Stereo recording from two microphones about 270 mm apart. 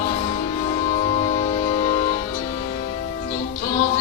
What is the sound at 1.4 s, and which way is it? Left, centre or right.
Music, left.